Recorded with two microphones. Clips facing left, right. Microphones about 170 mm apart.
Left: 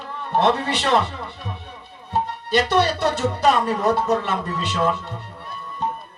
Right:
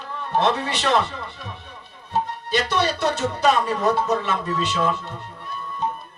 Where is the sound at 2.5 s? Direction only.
60° left (ahead or behind).